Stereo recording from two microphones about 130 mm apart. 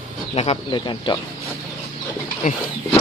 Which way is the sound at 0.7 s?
35° left (ahead or behind).